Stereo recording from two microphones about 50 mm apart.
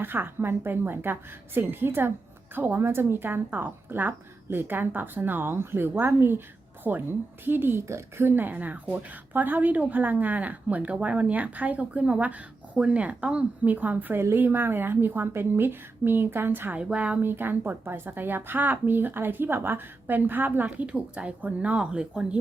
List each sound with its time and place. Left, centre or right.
0.0 s a woman's voice: right
6.8 s a woman's voice: right
8.5 s a woman's voice: right
16.7 s speech: right
17.2 s a woman's voice: right
20.8 s speech: right
21.8 s speech: centre